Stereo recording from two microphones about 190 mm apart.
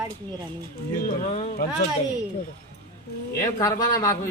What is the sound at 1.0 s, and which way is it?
Speech, 35° left (ahead or behind).